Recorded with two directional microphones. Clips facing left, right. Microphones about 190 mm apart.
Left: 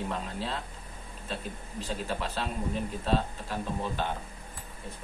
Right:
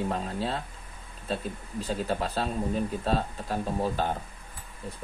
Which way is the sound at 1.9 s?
40° right (ahead or behind).